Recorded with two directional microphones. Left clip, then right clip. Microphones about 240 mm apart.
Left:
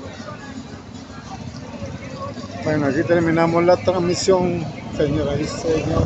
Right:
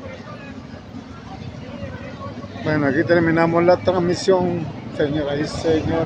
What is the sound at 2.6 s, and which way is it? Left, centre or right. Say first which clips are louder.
Speech: right 1 dB; centre.